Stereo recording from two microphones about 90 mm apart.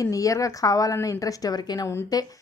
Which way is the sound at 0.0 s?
40° left (ahead or behind).